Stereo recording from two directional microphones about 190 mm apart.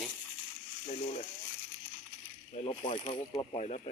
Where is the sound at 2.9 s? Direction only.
30° left (ahead or behind).